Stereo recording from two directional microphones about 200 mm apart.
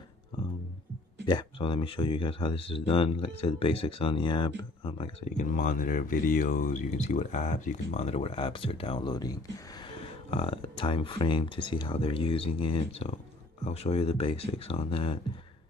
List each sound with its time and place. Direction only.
1.2 s speech: 25° left (ahead or behind)
5.4 s speech: 40° left (ahead or behind)